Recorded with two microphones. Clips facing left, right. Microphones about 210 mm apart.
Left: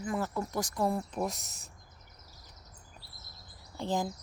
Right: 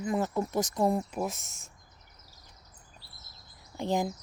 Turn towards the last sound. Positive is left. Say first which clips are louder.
# right 3 dB
turn(degrees=-15)  # may be behind; listen again after turning